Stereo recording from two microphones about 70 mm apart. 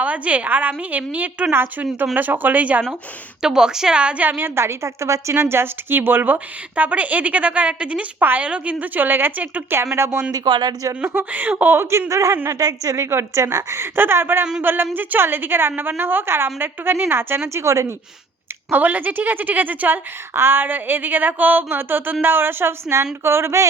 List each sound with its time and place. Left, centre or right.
0.0 s a woman's voice: right
3.4 s a woman's voice: centre
4.3 s a woman's voice: right
10.3 s speech: right
11.1 s a woman's voice: right
11.9 s speech: right
12.5 s speech: right
13.1 s a woman's voice: right
18.7 s a woman's voice: right